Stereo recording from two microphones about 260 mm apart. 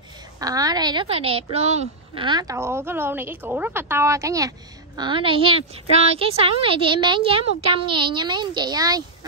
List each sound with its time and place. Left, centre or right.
0.4 s a woman's voice: centre